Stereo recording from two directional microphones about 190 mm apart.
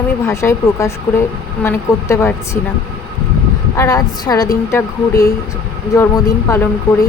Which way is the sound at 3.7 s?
20° left (ahead or behind).